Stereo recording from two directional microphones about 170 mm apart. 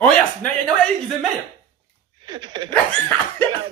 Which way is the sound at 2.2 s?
25° right (ahead or behind).